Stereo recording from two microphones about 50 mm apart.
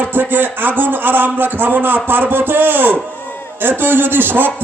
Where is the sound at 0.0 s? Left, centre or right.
Right.